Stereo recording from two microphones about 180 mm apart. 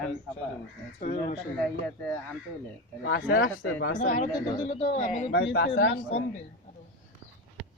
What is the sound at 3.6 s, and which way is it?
Speech, 90° left.